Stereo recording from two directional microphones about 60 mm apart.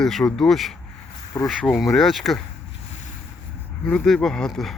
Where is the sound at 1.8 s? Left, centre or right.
Centre.